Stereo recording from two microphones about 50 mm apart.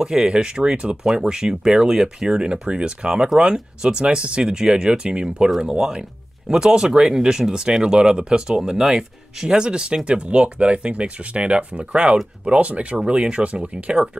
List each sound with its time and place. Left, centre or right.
0.0 s speech: centre